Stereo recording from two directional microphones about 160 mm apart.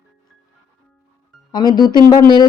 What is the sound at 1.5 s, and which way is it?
Speech, 25° left (ahead or behind).